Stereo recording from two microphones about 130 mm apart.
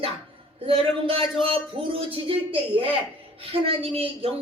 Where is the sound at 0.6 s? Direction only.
45° right (ahead or behind).